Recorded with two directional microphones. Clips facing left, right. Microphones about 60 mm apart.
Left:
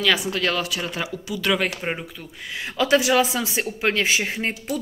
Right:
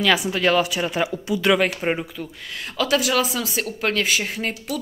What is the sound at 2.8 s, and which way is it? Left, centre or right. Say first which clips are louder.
Speech: left 2 dB; left.